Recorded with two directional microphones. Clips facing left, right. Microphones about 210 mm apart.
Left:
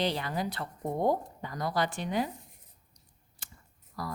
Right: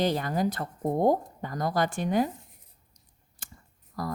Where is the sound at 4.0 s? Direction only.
45° right (ahead or behind).